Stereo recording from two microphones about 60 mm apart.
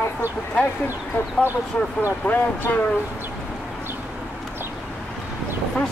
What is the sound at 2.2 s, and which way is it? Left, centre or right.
Speech, left.